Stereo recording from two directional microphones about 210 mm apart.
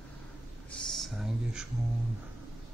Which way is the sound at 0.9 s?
Centre (ahead or behind).